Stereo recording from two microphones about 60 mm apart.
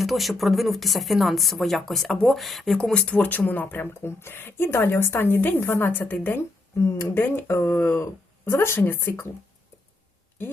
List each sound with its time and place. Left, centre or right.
0.0 s speech: centre
2.7 s speech: centre
3.2 s speech: left
6.7 s speech: left
7.2 s speech: left